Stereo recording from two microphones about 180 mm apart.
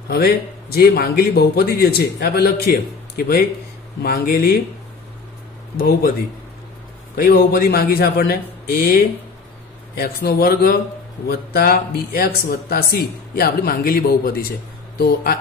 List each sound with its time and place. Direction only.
0.1 s a man's voice: 60° left (ahead or behind)
5.8 s a man's voice: 60° left (ahead or behind)
7.2 s a man's voice: 55° left (ahead or behind)